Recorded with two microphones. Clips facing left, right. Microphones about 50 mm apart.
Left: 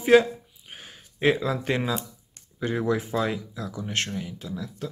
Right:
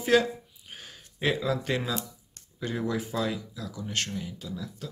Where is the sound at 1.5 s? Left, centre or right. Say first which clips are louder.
Left 2 dB; centre.